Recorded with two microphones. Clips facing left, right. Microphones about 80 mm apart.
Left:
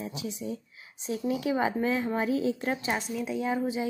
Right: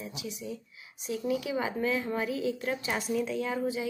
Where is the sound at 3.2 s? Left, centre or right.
Centre.